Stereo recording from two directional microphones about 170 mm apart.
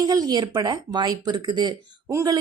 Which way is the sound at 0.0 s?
20° right (ahead or behind).